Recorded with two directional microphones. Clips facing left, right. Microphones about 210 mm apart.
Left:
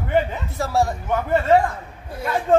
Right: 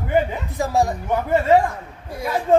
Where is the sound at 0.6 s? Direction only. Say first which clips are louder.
Right 1 dB; 15° right (ahead or behind).